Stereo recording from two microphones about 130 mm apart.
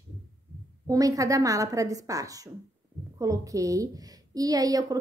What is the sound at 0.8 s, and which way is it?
A woman's voice, 25° right (ahead or behind).